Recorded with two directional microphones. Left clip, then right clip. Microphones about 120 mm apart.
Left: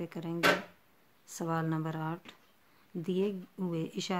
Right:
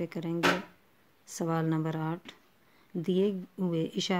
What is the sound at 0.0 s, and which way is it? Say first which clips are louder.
Speech: right 1 dB; 25° right (ahead or behind).